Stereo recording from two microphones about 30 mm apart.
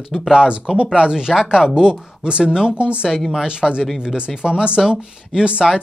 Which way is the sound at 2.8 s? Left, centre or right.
Right.